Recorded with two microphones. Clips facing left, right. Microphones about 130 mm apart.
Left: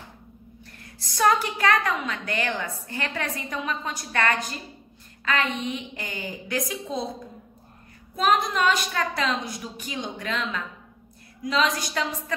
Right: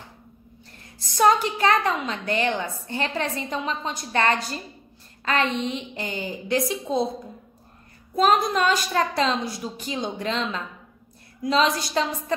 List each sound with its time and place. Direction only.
0.9 s a woman's voice: 25° right (ahead or behind)
8.2 s a woman's voice: 35° right (ahead or behind)